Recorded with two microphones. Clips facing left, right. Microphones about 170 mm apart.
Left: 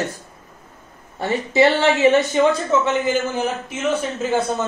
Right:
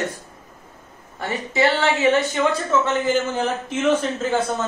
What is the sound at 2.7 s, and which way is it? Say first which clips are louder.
Speech: left 1 dB; 15° left (ahead or behind).